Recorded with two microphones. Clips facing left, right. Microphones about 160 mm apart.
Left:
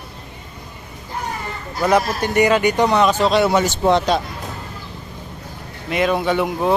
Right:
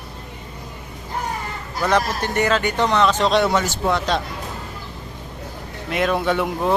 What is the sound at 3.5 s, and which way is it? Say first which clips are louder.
Speech: left 4 dB; 20° left (ahead or behind).